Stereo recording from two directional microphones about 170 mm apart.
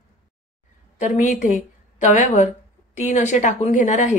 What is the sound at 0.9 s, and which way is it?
A woman's voice, 45° left (ahead or behind).